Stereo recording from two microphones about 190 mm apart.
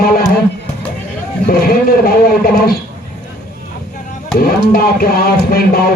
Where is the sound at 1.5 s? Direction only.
50° left (ahead or behind).